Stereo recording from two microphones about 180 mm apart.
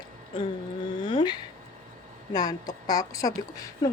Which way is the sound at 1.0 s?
25° left (ahead or behind).